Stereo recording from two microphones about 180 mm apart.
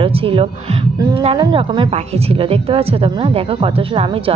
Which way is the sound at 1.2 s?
30° right (ahead or behind).